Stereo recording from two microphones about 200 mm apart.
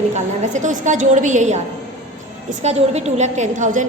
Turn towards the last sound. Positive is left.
turn(degrees=-40)  # may be behind; listen again after turning